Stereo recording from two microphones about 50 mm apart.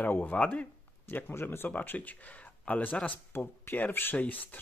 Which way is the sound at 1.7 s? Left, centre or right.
Left.